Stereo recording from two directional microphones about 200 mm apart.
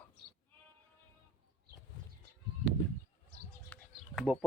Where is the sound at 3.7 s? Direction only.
5° left (ahead or behind).